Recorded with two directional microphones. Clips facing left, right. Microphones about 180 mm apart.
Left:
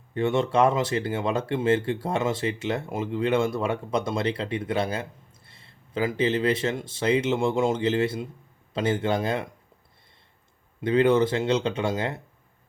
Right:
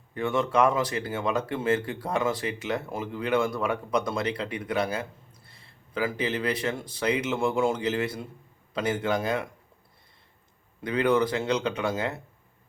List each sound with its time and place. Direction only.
0.1 s speech: 25° left (ahead or behind)
10.8 s speech: 25° left (ahead or behind)